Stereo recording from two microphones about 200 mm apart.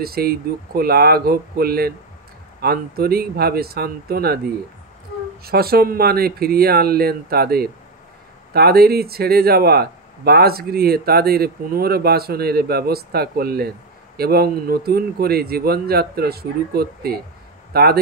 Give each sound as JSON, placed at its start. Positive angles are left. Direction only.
{"t": 0.0, "sound": "speech", "side_deg": -50}
{"t": 5.4, "sound": "speech", "side_deg": -50}